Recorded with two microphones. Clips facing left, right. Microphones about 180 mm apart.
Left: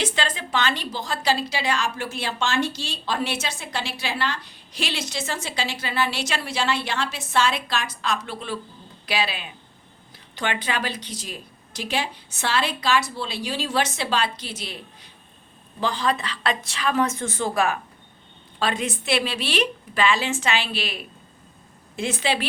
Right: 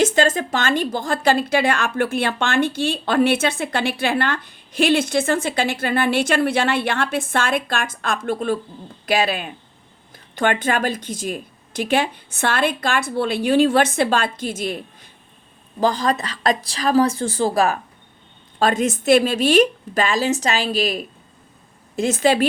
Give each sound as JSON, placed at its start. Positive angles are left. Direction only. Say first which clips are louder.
{"t": 0.0, "sound": "a woman's voice", "louder": "right 10 dB", "side_deg": -45}